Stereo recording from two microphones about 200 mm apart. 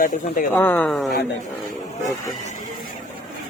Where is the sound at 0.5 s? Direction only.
10° left (ahead or behind).